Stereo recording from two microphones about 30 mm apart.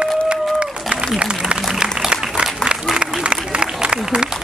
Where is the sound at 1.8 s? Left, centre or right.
Right.